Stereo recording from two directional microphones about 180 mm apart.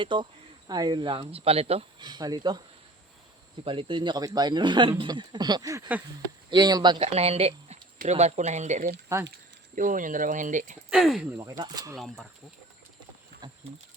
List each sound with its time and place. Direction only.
0.0 s speech: 25° right (ahead or behind)
3.6 s speech: 30° right (ahead or behind)
9.1 s speech: 15° right (ahead or behind)
9.7 s speech: 45° right (ahead or behind)
10.8 s speech: centre (ahead or behind); by 11.9 s 20° right (ahead or behind)
11.9 s speech: centre (ahead or behind)